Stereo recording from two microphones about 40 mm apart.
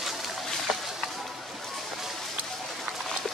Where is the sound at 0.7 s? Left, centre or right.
Centre.